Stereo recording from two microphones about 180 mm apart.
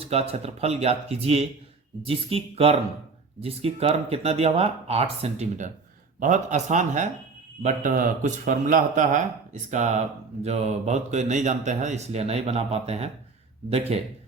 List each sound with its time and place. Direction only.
0.0 s a man's voice: 35° right (ahead or behind)